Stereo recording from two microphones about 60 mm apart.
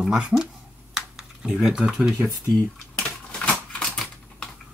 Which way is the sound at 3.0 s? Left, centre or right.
Centre.